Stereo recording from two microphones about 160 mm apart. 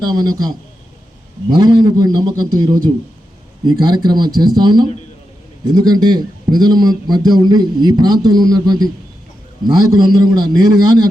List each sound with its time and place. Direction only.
0.0 s a man's voice: 25° right (ahead or behind)